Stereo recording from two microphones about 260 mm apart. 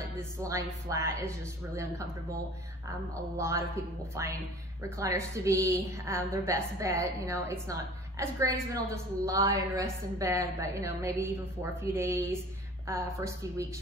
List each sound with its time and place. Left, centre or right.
0.2 s a woman's voice: centre
3.3 s a woman's voice: centre